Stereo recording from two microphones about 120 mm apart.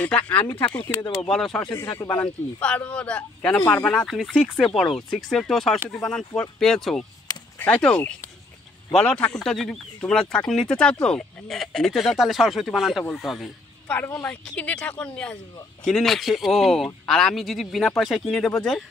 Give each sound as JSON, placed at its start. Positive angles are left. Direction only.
{"t": 0.0, "sound": "speech", "side_deg": 10}
{"t": 1.9, "sound": "speech", "side_deg": 15}
{"t": 13.8, "sound": "speech", "side_deg": 15}